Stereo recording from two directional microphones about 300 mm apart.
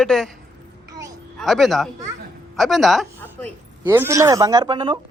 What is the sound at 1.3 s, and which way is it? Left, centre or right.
A man's voice, centre.